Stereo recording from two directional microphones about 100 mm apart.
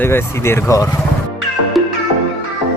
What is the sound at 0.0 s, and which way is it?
Speech, 25° left (ahead or behind).